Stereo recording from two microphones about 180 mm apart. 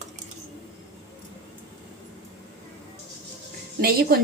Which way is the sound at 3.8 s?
60° right (ahead or behind).